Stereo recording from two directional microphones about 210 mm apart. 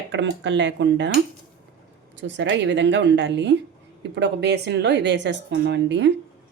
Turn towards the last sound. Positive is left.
turn(degrees=-55)  # may be behind; listen again after turning